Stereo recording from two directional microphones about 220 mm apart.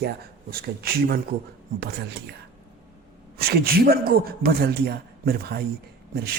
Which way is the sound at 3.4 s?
45° right (ahead or behind).